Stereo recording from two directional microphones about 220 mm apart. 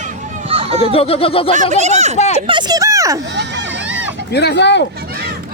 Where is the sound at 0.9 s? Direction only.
25° left (ahead or behind).